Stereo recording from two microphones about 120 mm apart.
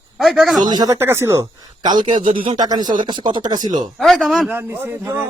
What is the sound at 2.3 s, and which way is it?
Speech, 50° right (ahead or behind).